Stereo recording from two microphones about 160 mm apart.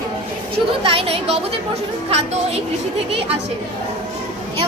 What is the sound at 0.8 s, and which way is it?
Speech, 35° right (ahead or behind).